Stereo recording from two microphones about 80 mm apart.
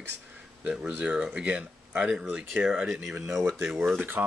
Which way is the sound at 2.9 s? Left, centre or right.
Centre.